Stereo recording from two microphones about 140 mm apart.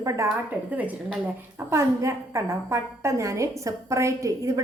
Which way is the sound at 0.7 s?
10° right (ahead or behind).